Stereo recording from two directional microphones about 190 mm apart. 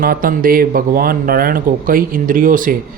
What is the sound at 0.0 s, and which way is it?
Speech, 50° right (ahead or behind).